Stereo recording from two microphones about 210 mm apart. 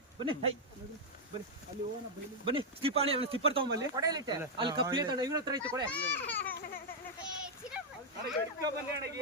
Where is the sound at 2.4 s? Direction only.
25° right (ahead or behind).